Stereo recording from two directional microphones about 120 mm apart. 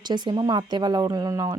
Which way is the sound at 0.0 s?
35° right (ahead or behind).